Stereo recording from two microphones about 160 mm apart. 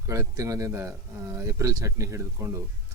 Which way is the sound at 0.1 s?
20° right (ahead or behind).